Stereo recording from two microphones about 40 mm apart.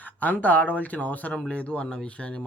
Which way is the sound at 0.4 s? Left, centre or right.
Left.